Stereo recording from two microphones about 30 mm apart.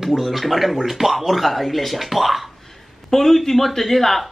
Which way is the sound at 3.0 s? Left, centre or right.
Centre.